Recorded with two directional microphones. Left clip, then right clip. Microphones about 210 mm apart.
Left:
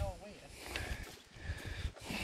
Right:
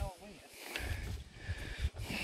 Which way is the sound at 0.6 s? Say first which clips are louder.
Right 1 dB; 15° right (ahead or behind).